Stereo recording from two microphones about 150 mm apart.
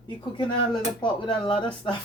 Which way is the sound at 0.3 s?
35° left (ahead or behind).